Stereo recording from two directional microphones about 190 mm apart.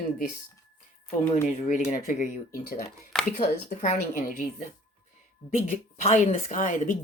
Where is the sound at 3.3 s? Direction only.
40° left (ahead or behind).